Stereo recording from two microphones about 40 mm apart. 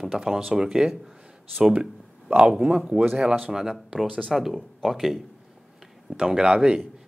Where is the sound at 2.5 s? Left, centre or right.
Right.